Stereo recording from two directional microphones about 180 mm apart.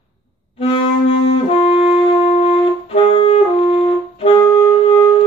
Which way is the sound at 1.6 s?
30° left (ahead or behind).